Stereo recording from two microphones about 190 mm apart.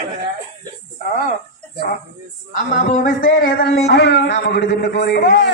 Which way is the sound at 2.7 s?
45° left (ahead or behind).